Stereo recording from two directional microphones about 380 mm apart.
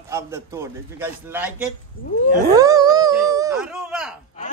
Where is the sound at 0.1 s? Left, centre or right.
Centre.